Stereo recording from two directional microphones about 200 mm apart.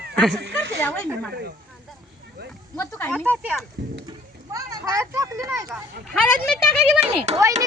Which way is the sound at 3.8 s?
60° right (ahead or behind).